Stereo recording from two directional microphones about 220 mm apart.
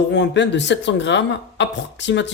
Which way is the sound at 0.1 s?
55° left (ahead or behind).